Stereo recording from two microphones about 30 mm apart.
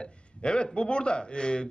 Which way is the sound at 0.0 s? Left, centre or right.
Left.